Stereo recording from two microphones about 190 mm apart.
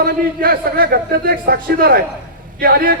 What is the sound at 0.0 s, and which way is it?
A man's voice, 50° right (ahead or behind).